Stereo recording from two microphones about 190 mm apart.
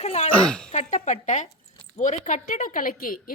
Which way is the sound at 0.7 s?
40° left (ahead or behind).